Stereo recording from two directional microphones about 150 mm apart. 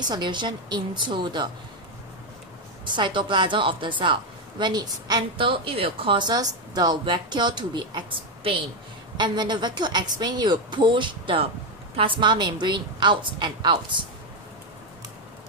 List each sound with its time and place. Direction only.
0.1 s a woman's voice: 30° right (ahead or behind)
2.8 s a woman's voice: 30° right (ahead or behind)
9.1 s a woman's voice: 30° right (ahead or behind)